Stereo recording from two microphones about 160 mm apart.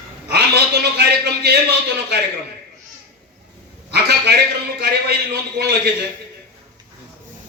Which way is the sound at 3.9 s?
90° right.